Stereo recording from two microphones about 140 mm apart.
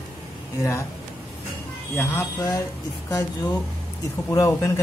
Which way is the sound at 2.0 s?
20° left (ahead or behind).